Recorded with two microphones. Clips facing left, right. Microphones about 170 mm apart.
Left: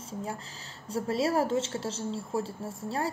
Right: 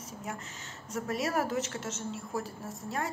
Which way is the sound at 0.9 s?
30° left (ahead or behind).